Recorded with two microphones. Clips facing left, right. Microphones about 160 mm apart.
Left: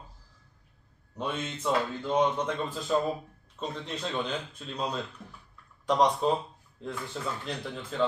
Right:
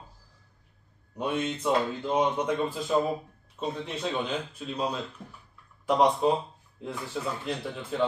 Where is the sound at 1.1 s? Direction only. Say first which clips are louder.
Right 4 dB; 10° right (ahead or behind).